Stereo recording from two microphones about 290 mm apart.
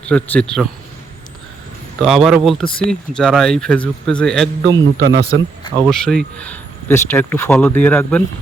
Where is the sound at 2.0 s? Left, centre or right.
Centre.